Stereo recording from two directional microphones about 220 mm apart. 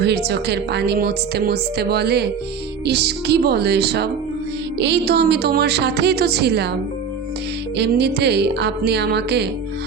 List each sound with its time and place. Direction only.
0.0 s speech: 50° right (ahead or behind)
7.8 s speech: 50° right (ahead or behind)